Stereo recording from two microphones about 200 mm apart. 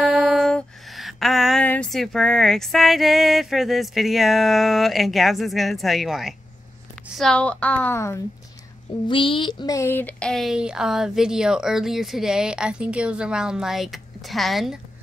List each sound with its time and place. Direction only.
0.0 s a sound: centre (ahead or behind)
7.2 s a woman's voice: 5° left (ahead or behind)
9.0 s speech: 25° left (ahead or behind); by 14.8 s centre (ahead or behind)